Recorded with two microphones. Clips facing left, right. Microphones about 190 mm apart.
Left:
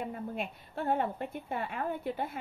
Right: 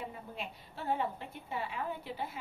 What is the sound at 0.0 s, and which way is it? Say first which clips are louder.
A woman's voice: left 6 dB; 55° left (ahead or behind).